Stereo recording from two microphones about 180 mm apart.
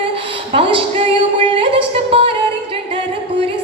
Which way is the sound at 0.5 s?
30° right (ahead or behind).